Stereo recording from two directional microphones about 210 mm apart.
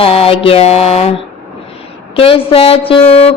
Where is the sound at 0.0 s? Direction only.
25° left (ahead or behind).